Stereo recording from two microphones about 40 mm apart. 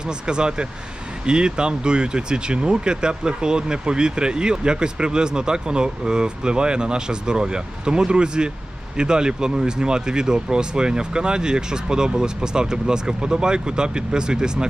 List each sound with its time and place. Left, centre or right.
0.0 s speech: right